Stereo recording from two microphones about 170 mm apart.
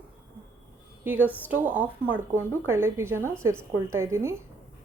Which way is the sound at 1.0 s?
10° right (ahead or behind).